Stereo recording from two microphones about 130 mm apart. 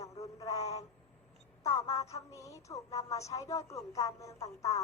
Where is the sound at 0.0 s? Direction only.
25° left (ahead or behind).